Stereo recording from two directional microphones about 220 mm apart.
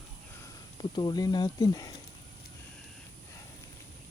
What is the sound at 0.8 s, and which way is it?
Speech, 20° left (ahead or behind).